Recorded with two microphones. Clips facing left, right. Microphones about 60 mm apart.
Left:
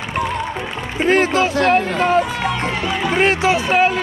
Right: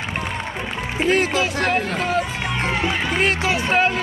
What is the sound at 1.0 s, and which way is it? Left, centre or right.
Speech, left.